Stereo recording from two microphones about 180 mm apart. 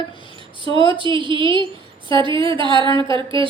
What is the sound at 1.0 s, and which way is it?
A woman's voice, 25° right (ahead or behind).